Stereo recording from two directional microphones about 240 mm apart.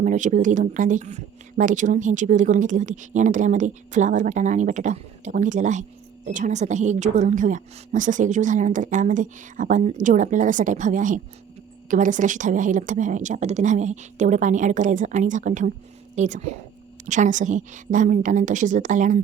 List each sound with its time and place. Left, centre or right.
0.0 s speech: right